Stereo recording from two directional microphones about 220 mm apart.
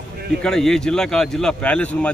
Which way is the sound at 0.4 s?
Centre (ahead or behind).